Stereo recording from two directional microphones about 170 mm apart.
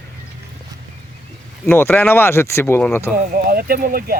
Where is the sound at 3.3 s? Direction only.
60° right (ahead or behind).